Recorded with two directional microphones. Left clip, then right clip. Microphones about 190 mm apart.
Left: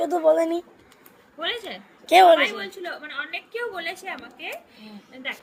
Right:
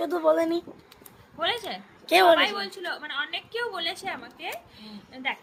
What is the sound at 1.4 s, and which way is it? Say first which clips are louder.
A woman's voice: right 1 dB; 30° right (ahead or behind).